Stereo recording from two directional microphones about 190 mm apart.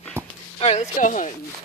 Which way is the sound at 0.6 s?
35° left (ahead or behind).